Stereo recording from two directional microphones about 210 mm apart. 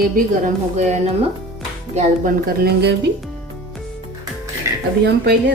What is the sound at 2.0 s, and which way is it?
Speech, 45° right (ahead or behind).